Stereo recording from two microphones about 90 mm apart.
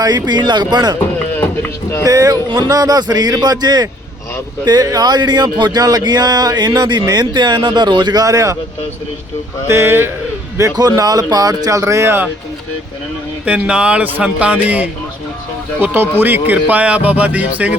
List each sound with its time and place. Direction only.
0.0 s speech: 50° right (ahead or behind)
2.0 s speech: 45° right (ahead or behind)
9.6 s a sound: 30° right (ahead or behind)
10.6 s speech: 45° right (ahead or behind)
13.4 s speech: 15° right (ahead or behind)